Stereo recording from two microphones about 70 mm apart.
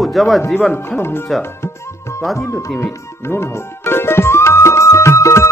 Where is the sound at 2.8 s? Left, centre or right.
Left.